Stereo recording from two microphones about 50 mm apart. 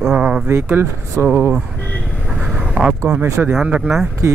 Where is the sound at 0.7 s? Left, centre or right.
Right.